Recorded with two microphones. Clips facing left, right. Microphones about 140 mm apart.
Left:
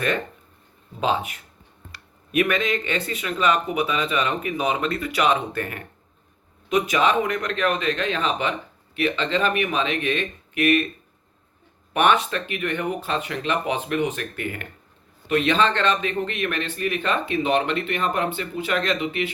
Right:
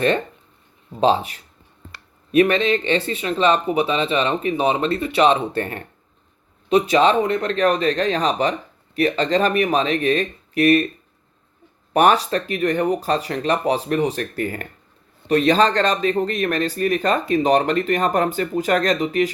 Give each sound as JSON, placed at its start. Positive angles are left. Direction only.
{"t": 0.9, "sound": "speech", "side_deg": -35}
{"t": 11.9, "sound": "speech", "side_deg": -35}